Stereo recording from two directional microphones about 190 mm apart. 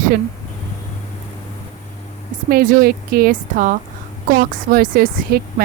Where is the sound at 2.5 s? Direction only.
50° right (ahead or behind).